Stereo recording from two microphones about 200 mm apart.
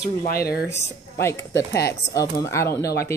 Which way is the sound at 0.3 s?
50° left (ahead or behind).